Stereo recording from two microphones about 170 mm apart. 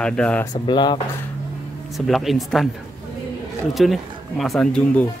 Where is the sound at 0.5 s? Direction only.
25° left (ahead or behind).